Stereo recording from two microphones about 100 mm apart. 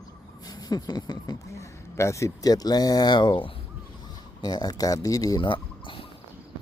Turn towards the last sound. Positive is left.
turn(degrees=55)  # may be behind; listen again after turning